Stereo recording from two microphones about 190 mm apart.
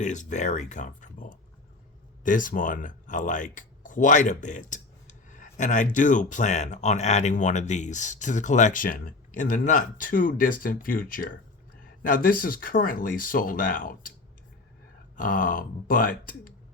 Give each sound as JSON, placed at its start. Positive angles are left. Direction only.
{"t": 0.0, "sound": "speech", "side_deg": 40}
{"t": 15.1, "sound": "speech", "side_deg": 45}